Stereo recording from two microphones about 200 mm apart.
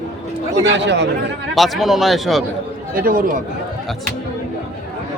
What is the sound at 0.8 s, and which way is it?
Speech, 60° right (ahead or behind).